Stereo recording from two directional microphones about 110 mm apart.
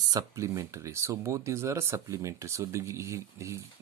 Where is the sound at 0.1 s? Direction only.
30° right (ahead or behind).